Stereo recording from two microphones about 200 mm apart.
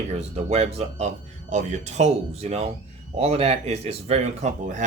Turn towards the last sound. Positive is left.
turn(degrees=-35)  # may be behind; listen again after turning